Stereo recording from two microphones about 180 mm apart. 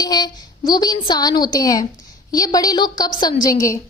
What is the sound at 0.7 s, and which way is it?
A woman's voice, 20° left (ahead or behind).